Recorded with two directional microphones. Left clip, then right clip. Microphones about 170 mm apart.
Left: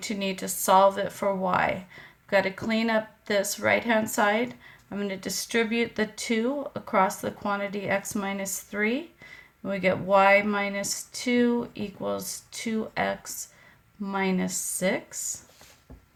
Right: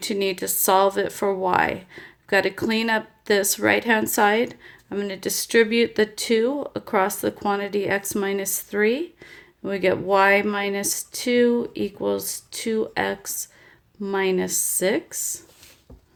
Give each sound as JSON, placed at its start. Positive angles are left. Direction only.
{"t": 0.0, "sound": "speech", "side_deg": -45}